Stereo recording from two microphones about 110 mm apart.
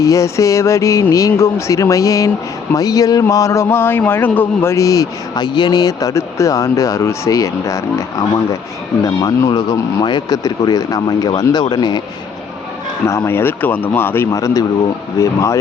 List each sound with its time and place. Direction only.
0.0 s a man's voice: 30° left (ahead or behind)
9.0 s speech: 35° left (ahead or behind)
13.1 s a man's voice: 20° left (ahead or behind)